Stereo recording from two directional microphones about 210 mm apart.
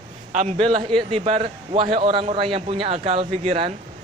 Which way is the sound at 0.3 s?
30° right (ahead or behind).